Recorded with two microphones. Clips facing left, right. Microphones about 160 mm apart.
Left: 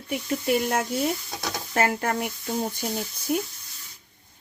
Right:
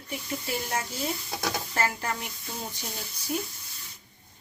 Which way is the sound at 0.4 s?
65° left (ahead or behind).